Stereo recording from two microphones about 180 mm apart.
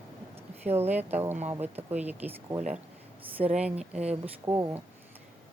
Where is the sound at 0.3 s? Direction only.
10° right (ahead or behind).